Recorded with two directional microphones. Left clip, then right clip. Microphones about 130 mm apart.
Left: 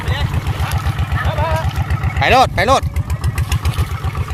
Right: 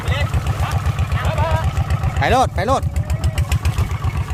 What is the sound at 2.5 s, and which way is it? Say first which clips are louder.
Speech: left 5 dB; 5° right (ahead or behind).